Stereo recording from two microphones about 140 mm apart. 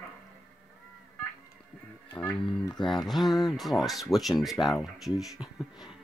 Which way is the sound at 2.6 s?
30° left (ahead or behind).